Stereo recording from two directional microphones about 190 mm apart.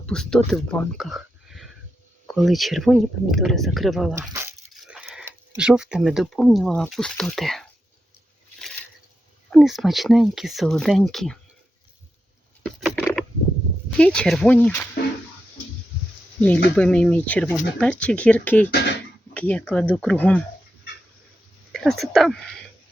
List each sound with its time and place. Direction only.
0.0 s speech: 5° left (ahead or behind)
4.1 s speech: 15° right (ahead or behind)
4.7 s coin: 5° right (ahead or behind)
5.2 s speech: 5° right (ahead or behind)
9.5 s speech: centre (ahead or behind)
12.6 s a sound: centre (ahead or behind)
13.9 s speech: 5° left (ahead or behind)
16.7 s speech: 5° left (ahead or behind)
18.7 s speech: 55° left (ahead or behind)
19.3 s speech: 5° left (ahead or behind)
21.7 s speech: centre (ahead or behind)